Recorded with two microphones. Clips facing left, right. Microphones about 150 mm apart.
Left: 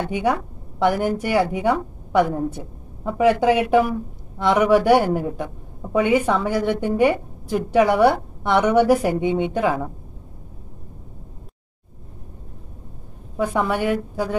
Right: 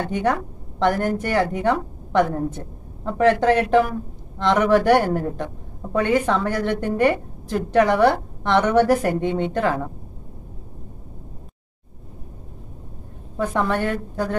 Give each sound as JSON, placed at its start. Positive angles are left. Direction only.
{"t": 0.1, "sound": "a woman's voice", "side_deg": 10}
{"t": 13.4, "sound": "a woman's voice", "side_deg": 10}